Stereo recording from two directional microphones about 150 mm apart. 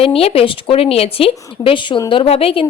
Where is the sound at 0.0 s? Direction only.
40° left (ahead or behind).